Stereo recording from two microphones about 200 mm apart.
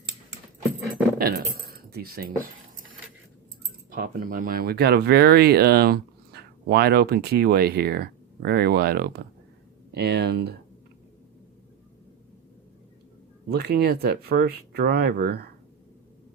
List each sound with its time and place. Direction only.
1.2 s a sound: 50° right (ahead or behind)
1.9 s speech: 50° right (ahead or behind)
3.9 s speech: 45° right (ahead or behind)
13.5 s speech: 50° right (ahead or behind)